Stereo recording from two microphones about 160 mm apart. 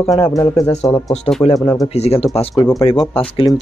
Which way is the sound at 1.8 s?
40° left (ahead or behind).